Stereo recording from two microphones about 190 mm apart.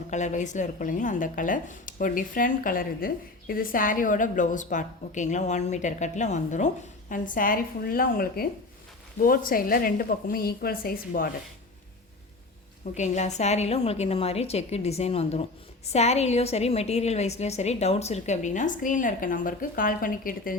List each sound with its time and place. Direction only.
0.1 s speech: 40° left (ahead or behind)
12.9 s a woman's voice: 35° left (ahead or behind)